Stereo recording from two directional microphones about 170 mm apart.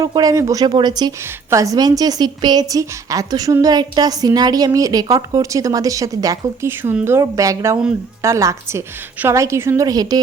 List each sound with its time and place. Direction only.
0.0 s a woman's voice: 20° right (ahead or behind)